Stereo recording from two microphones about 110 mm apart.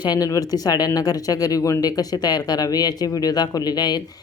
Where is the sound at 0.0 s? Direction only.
35° left (ahead or behind).